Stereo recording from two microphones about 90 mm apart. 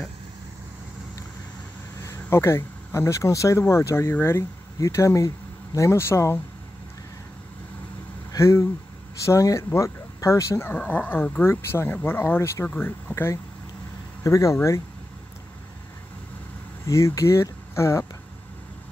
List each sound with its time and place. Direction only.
2.0 s speech: 30° left (ahead or behind)
4.7 s speech: 35° left (ahead or behind)
8.3 s speech: 30° left (ahead or behind)
10.9 s speech: 20° left (ahead or behind)
13.1 s speech: 30° left (ahead or behind)
16.8 s speech: 35° left (ahead or behind)